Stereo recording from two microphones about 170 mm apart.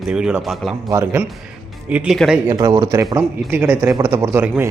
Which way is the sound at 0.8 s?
15° right (ahead or behind).